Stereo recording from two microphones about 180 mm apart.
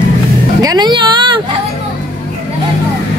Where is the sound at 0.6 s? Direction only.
20° right (ahead or behind).